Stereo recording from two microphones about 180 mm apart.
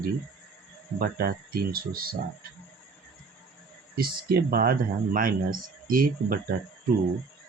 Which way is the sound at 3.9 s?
60° right (ahead or behind).